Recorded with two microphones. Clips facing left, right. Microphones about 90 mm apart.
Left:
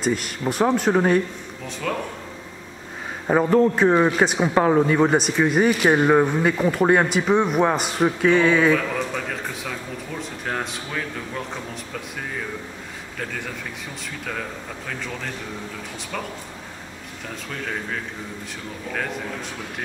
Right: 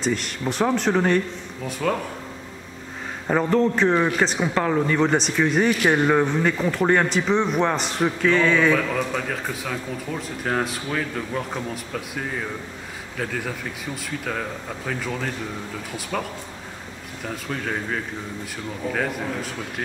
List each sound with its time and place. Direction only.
0.0 s a man's voice: 5° left (ahead or behind)
1.7 s speech: 5° right (ahead or behind)
3.3 s a man's voice: 10° left (ahead or behind)
14.9 s a man's voice: 5° right (ahead or behind)
17.5 s speech: 5° right (ahead or behind)